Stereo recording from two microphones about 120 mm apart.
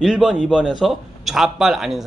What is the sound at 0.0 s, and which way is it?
Speech, 5° right (ahead or behind).